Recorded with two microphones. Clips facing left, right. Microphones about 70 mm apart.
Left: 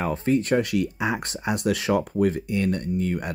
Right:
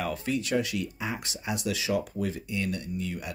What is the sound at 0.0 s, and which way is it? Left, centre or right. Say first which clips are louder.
Speech: left 7 dB; left.